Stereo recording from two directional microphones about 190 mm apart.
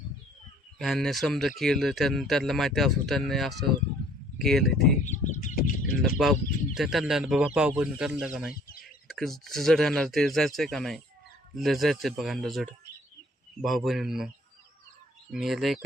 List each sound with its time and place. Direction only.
0.8 s speech: centre (ahead or behind)
5.0 s speech: 40° left (ahead or behind)
6.0 s speech: centre (ahead or behind)
15.3 s speech: centre (ahead or behind)